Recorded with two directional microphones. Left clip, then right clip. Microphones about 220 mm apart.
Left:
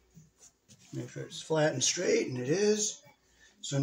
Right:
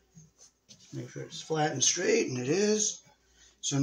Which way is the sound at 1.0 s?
15° right (ahead or behind).